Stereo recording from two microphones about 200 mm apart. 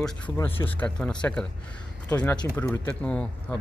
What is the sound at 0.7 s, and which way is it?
Speech, 5° left (ahead or behind).